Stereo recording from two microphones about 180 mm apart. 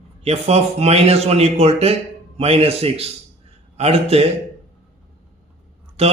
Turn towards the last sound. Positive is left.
turn(degrees=-35)  # may be behind; listen again after turning